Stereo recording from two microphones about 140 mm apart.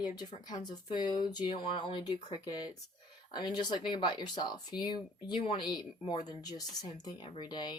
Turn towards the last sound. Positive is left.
turn(degrees=30)  # may be behind; listen again after turning